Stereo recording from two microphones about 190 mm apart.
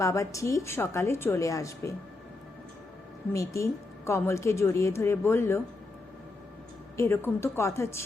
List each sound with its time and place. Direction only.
0.0 s a woman's voice: 15° left (ahead or behind)
3.3 s a woman's voice: 15° left (ahead or behind)
6.9 s a woman's voice: 15° left (ahead or behind)